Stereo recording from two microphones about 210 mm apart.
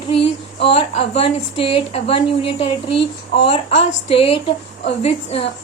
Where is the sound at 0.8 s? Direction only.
30° left (ahead or behind).